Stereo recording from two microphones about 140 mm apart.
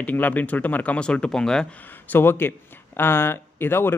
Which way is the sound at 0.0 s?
10° left (ahead or behind).